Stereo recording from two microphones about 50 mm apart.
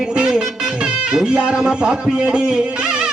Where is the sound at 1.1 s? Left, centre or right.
Centre.